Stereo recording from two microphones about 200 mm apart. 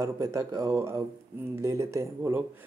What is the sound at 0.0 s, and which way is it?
Speech, 15° right (ahead or behind).